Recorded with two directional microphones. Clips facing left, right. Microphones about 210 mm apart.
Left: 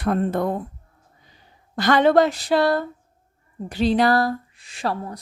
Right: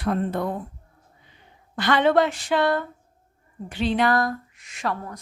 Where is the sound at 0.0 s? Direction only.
50° left (ahead or behind).